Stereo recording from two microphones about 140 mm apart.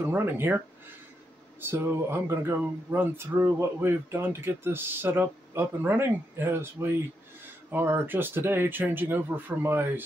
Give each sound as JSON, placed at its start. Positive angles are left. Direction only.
{"t": 0.0, "sound": "speech", "side_deg": -15}
{"t": 1.6, "sound": "speech", "side_deg": -15}